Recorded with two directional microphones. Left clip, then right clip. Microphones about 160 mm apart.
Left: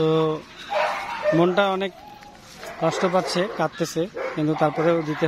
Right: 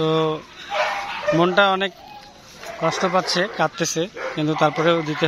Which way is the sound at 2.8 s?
15° left (ahead or behind).